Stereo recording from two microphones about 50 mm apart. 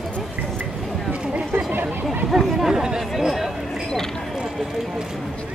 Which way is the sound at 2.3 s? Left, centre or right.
Centre.